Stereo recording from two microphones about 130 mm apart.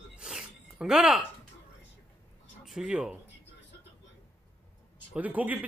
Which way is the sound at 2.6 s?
5° right (ahead or behind).